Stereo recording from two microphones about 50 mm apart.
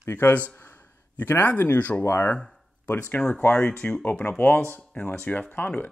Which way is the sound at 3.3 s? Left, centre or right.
Left.